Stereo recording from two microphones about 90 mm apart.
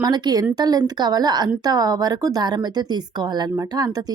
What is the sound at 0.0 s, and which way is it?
Speech, 45° right (ahead or behind).